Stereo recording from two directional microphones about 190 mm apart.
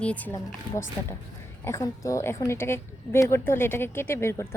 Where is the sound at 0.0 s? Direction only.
5° left (ahead or behind).